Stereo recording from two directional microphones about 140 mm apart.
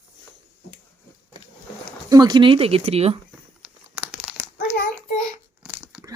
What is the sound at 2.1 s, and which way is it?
Speech, 30° right (ahead or behind).